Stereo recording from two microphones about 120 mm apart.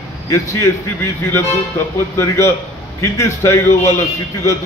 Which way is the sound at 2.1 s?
20° left (ahead or behind).